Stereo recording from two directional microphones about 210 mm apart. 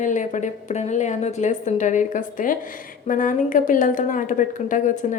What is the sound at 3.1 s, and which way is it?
A woman's voice, 40° left (ahead or behind).